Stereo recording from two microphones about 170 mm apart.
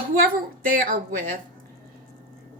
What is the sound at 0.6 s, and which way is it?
Speech, 55° right (ahead or behind).